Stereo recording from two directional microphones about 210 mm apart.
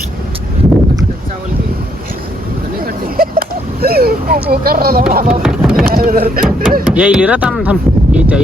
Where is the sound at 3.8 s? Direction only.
45° right (ahead or behind).